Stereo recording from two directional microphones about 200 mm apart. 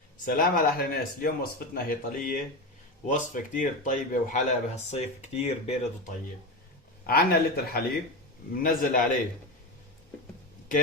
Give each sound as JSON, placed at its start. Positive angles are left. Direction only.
{"t": 0.3, "sound": "speech", "side_deg": 45}
{"t": 7.1, "sound": "speech", "side_deg": 50}